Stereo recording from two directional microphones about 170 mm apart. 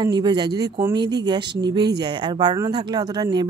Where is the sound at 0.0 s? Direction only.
25° right (ahead or behind).